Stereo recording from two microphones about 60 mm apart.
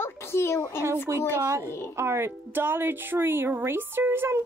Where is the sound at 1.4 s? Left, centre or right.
Right.